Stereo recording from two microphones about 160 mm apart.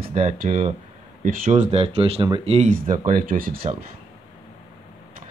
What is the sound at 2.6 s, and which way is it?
Speech, 60° right (ahead or behind).